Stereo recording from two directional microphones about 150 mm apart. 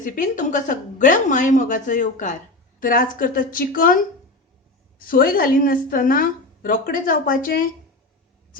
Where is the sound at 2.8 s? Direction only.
65° left (ahead or behind).